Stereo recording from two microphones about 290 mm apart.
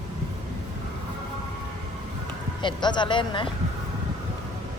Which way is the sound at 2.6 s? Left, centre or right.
Centre.